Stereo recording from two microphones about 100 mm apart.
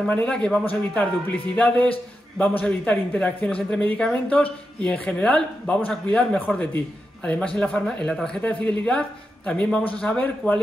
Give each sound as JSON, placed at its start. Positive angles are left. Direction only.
{"t": 0.0, "sound": "speech", "side_deg": 10}